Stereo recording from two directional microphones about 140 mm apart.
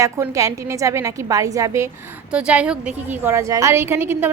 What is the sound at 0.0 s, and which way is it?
Speech, 20° right (ahead or behind).